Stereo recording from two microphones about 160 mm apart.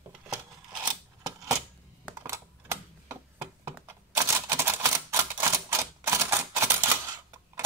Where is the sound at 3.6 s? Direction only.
15° right (ahead or behind).